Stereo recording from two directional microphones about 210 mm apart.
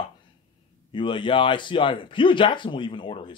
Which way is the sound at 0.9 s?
20° left (ahead or behind).